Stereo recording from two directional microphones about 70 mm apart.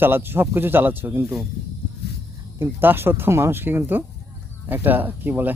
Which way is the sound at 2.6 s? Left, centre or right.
Right.